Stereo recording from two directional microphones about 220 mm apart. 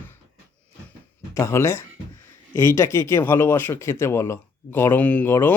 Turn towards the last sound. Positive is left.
turn(degrees=10)  # may be behind; listen again after turning